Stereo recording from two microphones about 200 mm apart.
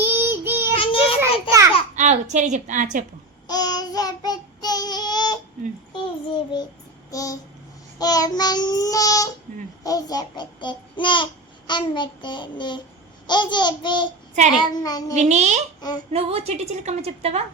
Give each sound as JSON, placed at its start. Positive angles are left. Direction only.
{"t": 0.0, "sound": "child singing", "side_deg": -10}
{"t": 1.2, "sound": "a sound", "side_deg": -15}
{"t": 2.0, "sound": "a woman's voice", "side_deg": -35}
{"t": 3.4, "sound": "child singing", "side_deg": 20}
{"t": 7.1, "sound": "a sound", "side_deg": 15}
{"t": 7.9, "sound": "child singing", "side_deg": 20}
{"t": 9.8, "sound": "babbling", "side_deg": 20}
{"t": 13.2, "sound": "child singing", "side_deg": 20}
{"t": 15.1, "sound": "a woman's voice", "side_deg": -35}